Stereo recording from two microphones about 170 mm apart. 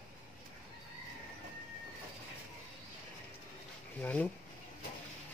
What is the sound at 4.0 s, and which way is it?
Speech, 10° left (ahead or behind).